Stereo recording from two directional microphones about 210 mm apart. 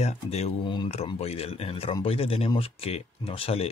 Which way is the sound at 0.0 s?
30° left (ahead or behind).